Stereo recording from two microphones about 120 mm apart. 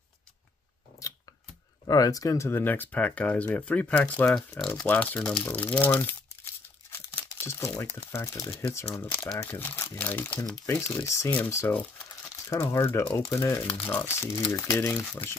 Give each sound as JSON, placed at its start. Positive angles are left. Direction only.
{"t": 1.0, "sound": "scissors", "side_deg": 25}
{"t": 1.9, "sound": "speech", "side_deg": 30}
{"t": 4.8, "sound": "speech", "side_deg": 15}
{"t": 5.4, "sound": "crumpling", "side_deg": 15}
{"t": 7.9, "sound": "speech", "side_deg": 20}